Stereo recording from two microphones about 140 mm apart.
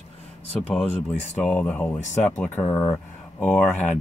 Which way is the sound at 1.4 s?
10° left (ahead or behind).